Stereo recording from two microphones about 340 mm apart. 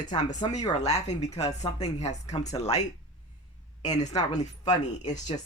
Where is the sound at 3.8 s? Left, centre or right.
Centre.